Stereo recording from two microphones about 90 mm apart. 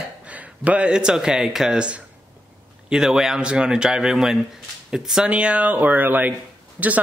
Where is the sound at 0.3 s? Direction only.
15° right (ahead or behind).